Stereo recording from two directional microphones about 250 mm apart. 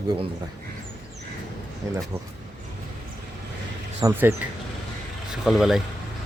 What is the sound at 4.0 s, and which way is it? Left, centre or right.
Speech, centre.